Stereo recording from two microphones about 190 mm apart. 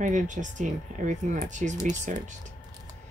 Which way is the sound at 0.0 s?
40° right (ahead or behind).